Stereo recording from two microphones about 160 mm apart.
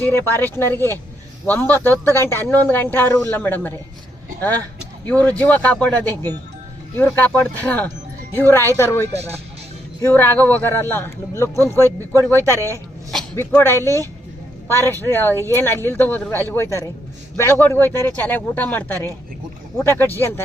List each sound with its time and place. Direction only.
0.0 s speech: 15° left (ahead or behind)
5.0 s speech: 10° left (ahead or behind)